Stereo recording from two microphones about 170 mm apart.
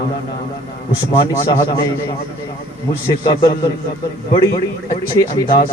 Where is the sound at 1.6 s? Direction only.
20° left (ahead or behind).